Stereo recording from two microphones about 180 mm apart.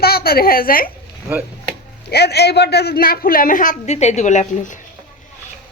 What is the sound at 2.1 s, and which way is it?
A man's voice, 65° left (ahead or behind).